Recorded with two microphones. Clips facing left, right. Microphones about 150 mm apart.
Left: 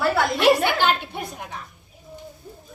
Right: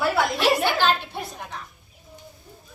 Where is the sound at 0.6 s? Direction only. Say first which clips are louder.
Left 1 dB; 15° left (ahead or behind).